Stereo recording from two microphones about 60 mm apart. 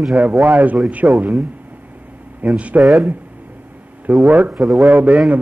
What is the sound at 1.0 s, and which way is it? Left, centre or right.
Speech, right.